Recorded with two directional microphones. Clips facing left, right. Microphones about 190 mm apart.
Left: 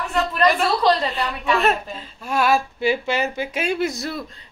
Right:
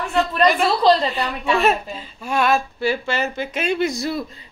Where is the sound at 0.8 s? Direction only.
30° right (ahead or behind).